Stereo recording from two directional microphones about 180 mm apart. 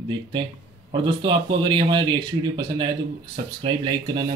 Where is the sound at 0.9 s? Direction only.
30° right (ahead or behind).